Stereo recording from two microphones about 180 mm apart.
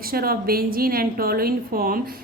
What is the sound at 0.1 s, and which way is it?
A woman's voice, 55° right (ahead or behind).